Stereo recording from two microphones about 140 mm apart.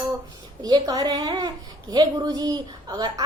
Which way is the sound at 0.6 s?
30° right (ahead or behind).